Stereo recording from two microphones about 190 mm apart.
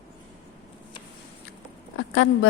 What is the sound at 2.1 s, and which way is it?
Speech, 75° left (ahead or behind).